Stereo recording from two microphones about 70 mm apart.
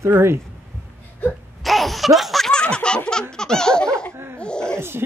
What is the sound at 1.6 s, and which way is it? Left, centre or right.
Laughter, centre.